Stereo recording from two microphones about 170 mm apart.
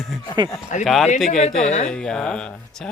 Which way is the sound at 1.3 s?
45° left (ahead or behind).